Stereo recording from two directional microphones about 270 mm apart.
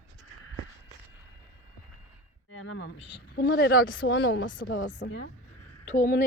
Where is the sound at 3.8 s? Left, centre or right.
Left.